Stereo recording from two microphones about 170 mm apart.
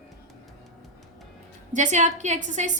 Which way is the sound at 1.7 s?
45° right (ahead or behind).